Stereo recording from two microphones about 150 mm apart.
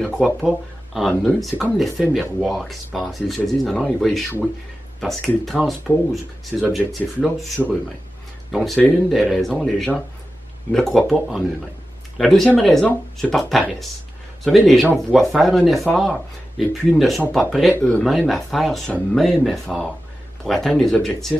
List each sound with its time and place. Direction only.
0.0 s speech: centre (ahead or behind)
17.7 s speech: 10° left (ahead or behind)